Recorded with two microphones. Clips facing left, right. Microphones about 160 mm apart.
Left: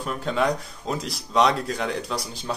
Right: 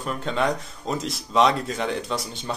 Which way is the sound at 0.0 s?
Centre (ahead or behind).